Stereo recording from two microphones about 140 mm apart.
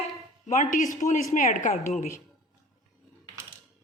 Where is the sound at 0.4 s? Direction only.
60° left (ahead or behind).